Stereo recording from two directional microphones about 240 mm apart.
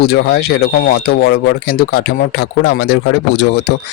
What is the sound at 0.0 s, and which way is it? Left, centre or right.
Speech, left.